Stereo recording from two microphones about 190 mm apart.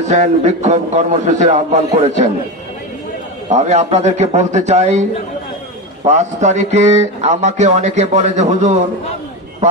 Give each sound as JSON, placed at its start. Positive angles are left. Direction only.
{"t": 0.0, "sound": "speech", "side_deg": -35}
{"t": 3.4, "sound": "speech", "side_deg": -35}
{"t": 6.0, "sound": "speech", "side_deg": -35}